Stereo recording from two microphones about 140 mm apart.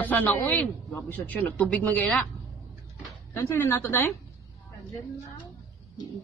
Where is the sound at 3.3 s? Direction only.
15° left (ahead or behind).